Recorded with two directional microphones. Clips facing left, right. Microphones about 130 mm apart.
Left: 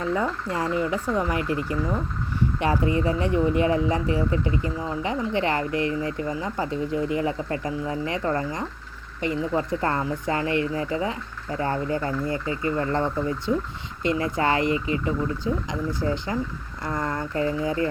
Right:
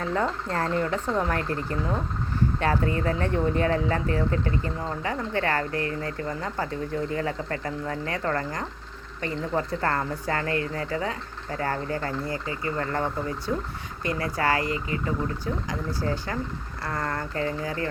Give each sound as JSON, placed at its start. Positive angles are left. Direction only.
{"t": 0.1, "sound": "speech", "side_deg": 10}
{"t": 14.0, "sound": "speech", "side_deg": 20}